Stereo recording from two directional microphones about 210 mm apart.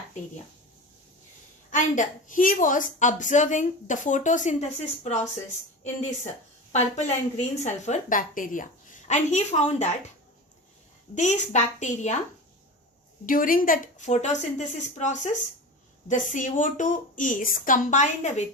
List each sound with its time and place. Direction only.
1.7 s a woman's voice: 35° left (ahead or behind)
6.7 s a woman's voice: 35° left (ahead or behind)
11.1 s a woman's voice: 35° left (ahead or behind)
13.2 s a woman's voice: 40° left (ahead or behind)